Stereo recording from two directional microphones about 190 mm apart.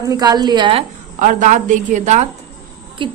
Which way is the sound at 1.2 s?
40° right (ahead or behind).